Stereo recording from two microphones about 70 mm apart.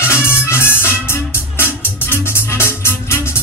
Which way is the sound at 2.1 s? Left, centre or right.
Left.